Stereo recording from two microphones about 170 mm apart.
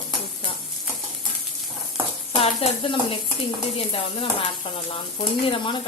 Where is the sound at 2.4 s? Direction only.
30° left (ahead or behind).